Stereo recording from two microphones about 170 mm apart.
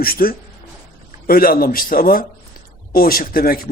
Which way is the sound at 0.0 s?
60° left (ahead or behind).